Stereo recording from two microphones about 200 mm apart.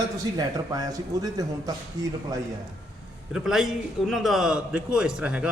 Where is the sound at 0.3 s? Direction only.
20° right (ahead or behind).